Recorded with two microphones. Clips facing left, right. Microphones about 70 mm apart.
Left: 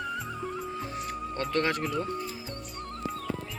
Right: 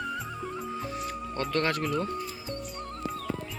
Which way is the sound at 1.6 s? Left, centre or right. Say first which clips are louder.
Even; centre.